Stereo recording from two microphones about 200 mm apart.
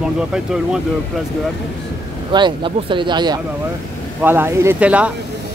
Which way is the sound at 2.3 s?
25° right (ahead or behind).